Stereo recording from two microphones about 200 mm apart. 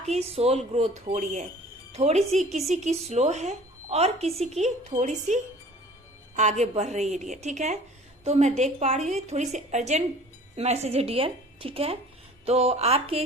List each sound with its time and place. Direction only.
0.0 s a woman's voice: 30° right (ahead or behind)